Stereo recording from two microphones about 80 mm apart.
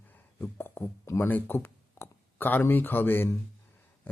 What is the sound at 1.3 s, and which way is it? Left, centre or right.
Speech, left.